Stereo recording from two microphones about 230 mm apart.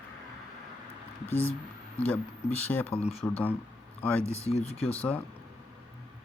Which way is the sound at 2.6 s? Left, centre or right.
Centre.